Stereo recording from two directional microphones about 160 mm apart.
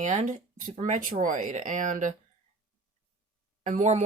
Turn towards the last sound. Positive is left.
turn(degrees=-50)  # may be behind; listen again after turning